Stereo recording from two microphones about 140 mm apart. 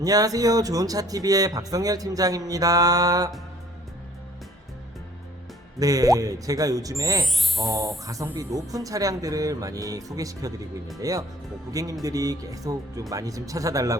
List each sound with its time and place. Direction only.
0.0 s speech: 25° right (ahead or behind)
5.8 s speech: 25° right (ahead or behind)
7.3 s speech: centre (ahead or behind)
8.0 s speech: 25° right (ahead or behind)